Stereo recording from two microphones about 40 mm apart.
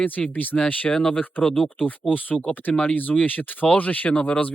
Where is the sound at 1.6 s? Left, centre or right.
Left.